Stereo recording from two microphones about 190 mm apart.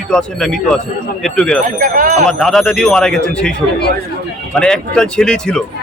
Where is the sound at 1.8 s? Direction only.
45° right (ahead or behind).